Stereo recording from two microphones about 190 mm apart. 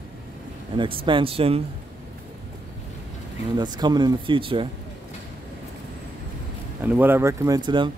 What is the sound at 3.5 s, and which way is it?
Speech, 20° right (ahead or behind).